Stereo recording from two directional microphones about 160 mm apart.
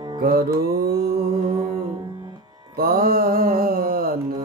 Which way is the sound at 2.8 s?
65° right (ahead or behind).